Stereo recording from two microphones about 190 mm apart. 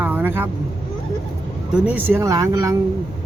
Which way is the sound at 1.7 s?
5° right (ahead or behind).